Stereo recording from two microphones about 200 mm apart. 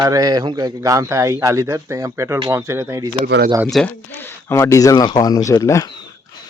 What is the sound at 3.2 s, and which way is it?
Speech, 55° right (ahead or behind).